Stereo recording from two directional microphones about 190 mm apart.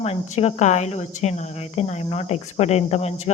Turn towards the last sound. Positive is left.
turn(degrees=35)  # may be behind; listen again after turning